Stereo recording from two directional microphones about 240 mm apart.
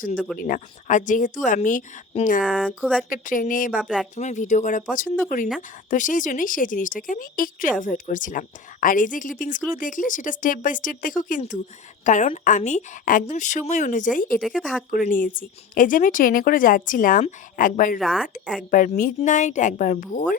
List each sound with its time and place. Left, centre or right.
0.3 s speech: left
2.4 s speech: centre
3.1 s speech: left
14.4 s speech: centre
14.8 s speech: left
18.0 s speech: centre
18.7 s speech: left